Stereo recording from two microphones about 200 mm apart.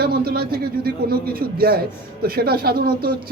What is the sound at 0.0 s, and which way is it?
Speech, 50° right (ahead or behind).